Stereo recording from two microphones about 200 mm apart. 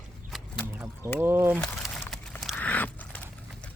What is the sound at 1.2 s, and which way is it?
Speech, 10° right (ahead or behind).